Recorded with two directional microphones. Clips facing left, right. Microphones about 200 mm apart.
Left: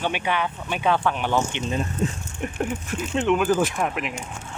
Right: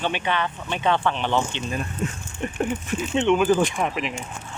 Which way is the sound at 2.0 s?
30° left (ahead or behind).